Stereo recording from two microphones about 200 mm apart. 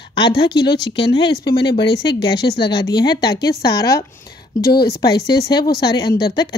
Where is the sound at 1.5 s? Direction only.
55° left (ahead or behind).